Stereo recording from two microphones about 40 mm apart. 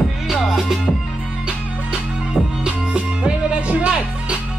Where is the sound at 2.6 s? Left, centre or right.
Right.